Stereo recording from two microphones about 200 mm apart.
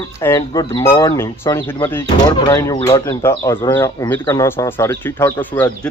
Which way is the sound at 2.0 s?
20° left (ahead or behind).